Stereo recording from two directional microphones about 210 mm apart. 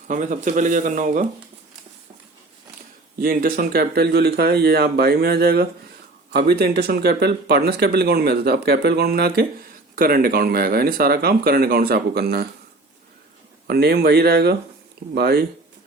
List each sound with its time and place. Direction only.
0.1 s speech: 35° right (ahead or behind)
3.2 s speech: 45° right (ahead or behind)
13.7 s speech: 50° right (ahead or behind)